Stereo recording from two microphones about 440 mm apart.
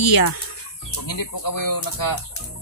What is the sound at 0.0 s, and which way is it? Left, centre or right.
Speech, left.